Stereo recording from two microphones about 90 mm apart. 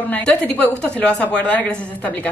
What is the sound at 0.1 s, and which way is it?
Speech, 20° left (ahead or behind).